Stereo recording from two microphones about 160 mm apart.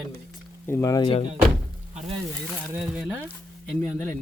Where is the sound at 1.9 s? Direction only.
45° right (ahead or behind).